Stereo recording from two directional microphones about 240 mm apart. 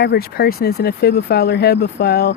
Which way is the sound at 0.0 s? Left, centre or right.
Left.